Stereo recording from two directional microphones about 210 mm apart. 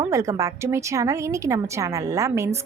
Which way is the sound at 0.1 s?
15° right (ahead or behind).